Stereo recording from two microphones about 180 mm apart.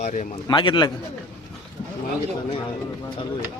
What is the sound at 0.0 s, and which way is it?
Speech, 40° left (ahead or behind).